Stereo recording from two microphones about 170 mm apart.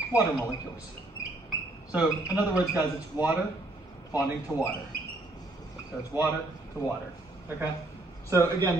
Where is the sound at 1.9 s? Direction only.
10° right (ahead or behind).